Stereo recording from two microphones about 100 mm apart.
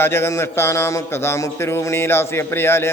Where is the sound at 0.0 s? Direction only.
25° left (ahead or behind).